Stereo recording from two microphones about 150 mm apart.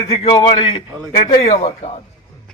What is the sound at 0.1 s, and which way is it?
Speech, 40° left (ahead or behind).